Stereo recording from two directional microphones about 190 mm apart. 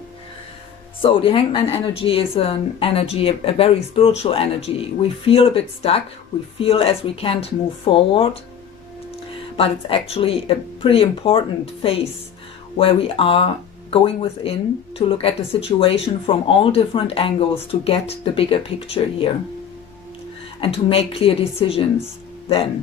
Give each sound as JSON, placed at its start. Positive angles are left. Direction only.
{"t": 1.0, "sound": "speech", "side_deg": 25}
{"t": 9.6, "sound": "speech", "side_deg": 30}
{"t": 20.6, "sound": "speech", "side_deg": 30}